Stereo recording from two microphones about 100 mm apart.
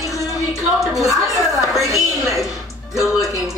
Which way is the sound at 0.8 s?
Centre (ahead or behind).